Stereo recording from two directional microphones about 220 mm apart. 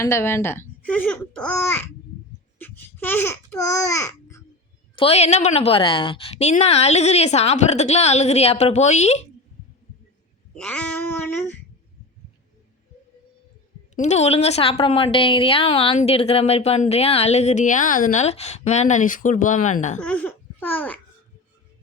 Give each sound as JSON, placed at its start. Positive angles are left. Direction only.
{"t": 0.0, "sound": "a child's voice", "side_deg": 10}
{"t": 2.6, "sound": "babbling", "side_deg": 10}
{"t": 4.9, "sound": "a woman's voice", "side_deg": 30}
{"t": 10.5, "sound": "a sound", "side_deg": 5}
{"t": 13.9, "sound": "a woman's voice", "side_deg": 30}
{"t": 20.0, "sound": "speech", "side_deg": 5}